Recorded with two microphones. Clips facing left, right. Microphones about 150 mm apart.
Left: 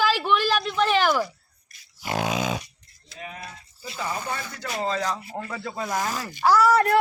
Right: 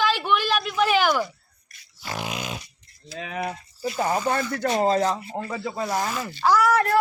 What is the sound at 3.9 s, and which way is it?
Speech, 50° right (ahead or behind).